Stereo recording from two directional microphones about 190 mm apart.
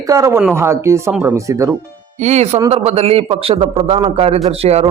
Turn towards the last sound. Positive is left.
turn(degrees=-35)  # may be behind; listen again after turning